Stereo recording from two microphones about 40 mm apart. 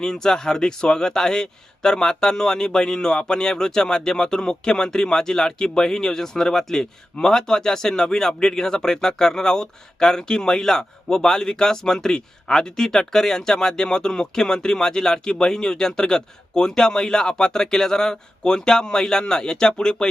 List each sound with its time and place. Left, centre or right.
0.0 s a man's voice: centre